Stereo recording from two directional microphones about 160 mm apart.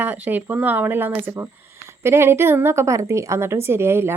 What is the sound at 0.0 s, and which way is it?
Speech, 10° right (ahead or behind).